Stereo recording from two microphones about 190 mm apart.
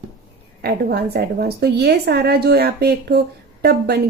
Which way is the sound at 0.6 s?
55° right (ahead or behind).